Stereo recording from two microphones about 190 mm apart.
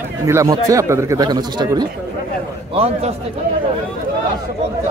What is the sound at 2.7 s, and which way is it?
Speech, 30° right (ahead or behind).